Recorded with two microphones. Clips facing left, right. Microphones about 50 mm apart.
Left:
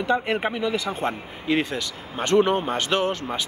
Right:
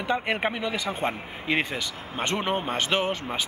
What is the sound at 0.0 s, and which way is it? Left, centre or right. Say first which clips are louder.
Speech: left 3 dB; centre.